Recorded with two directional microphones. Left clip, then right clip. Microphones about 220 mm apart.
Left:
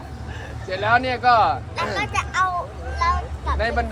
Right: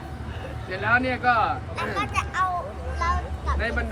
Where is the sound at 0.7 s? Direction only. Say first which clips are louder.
Left 3 dB; 10° left (ahead or behind).